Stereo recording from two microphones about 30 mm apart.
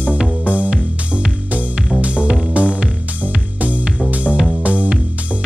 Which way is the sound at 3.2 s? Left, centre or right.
Right.